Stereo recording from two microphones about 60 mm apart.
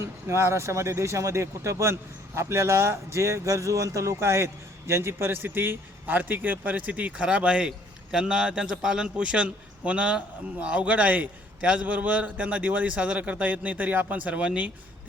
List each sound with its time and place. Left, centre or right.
0.0 s a man's voice: right; by 14.7 s centre